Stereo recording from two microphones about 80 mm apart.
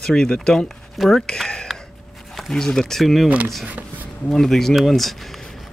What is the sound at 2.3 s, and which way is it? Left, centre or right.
Speech, centre.